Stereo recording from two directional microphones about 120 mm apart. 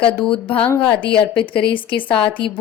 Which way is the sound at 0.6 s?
15° left (ahead or behind).